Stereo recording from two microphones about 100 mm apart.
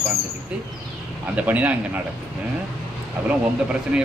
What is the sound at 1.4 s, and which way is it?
Speech, 15° right (ahead or behind).